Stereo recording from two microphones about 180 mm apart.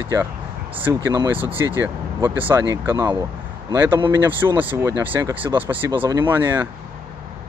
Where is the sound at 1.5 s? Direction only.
15° right (ahead or behind).